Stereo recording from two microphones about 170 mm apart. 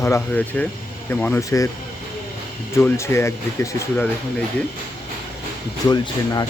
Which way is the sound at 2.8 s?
15° left (ahead or behind).